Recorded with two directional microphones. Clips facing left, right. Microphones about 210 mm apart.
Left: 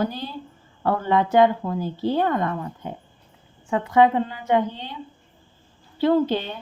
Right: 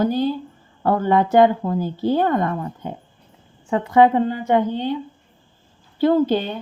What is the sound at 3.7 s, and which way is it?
A woman's voice, 40° right (ahead or behind).